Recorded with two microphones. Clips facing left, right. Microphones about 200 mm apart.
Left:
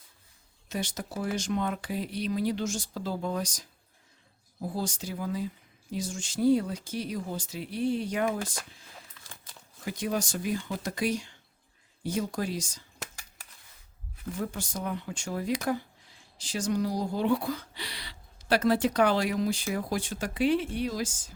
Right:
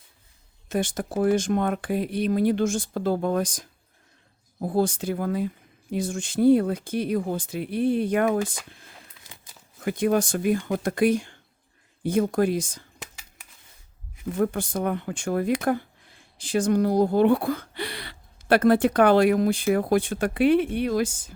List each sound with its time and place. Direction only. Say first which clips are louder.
0.7 s speech: right 8 dB; 50° right (ahead or behind)
14.3 s speech: right 10 dB; 55° right (ahead or behind)